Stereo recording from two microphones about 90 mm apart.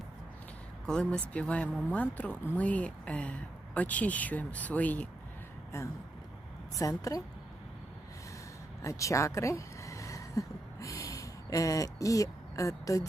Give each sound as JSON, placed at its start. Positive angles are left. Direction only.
{"t": 0.9, "sound": "speech", "side_deg": 10}
{"t": 5.7, "sound": "a woman's voice", "side_deg": 30}
{"t": 8.8, "sound": "speech", "side_deg": 35}